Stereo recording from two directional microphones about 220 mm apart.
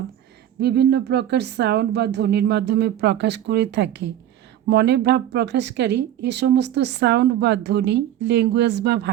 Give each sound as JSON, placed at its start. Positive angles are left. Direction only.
{"t": 0.6, "sound": "speech", "side_deg": -50}